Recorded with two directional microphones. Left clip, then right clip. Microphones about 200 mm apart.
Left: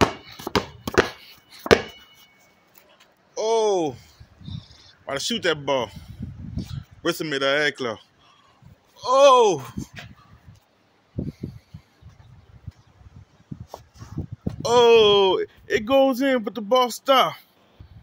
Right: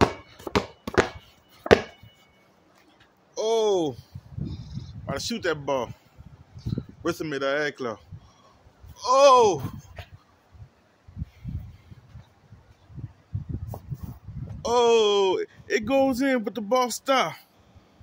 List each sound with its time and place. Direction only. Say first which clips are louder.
0.5 s a sound: left 2 dB; 45° left (ahead or behind)
3.3 s a sound: left 2 dB; centre (ahead or behind)
4.5 s purr: right 1 dB; centre (ahead or behind)
6.5 s speech: right 6 dB; 5° left (ahead or behind)
9.0 s speech: left 2 dB; 20° left (ahead or behind)
14.6 s speech: left 5 dB; 15° left (ahead or behind); by 17.5 s centre (ahead or behind)